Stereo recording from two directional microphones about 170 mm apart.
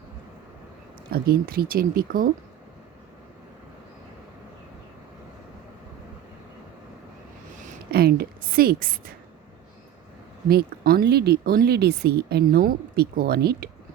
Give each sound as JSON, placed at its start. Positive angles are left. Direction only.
{"t": 1.1, "sound": "speech", "side_deg": -65}
{"t": 7.9, "sound": "a sound", "side_deg": -65}
{"t": 10.5, "sound": "speech", "side_deg": -65}